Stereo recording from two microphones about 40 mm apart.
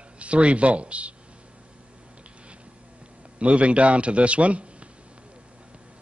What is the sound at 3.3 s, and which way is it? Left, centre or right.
A man's voice, right.